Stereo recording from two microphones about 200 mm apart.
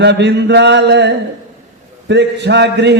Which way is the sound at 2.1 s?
60° right (ahead or behind).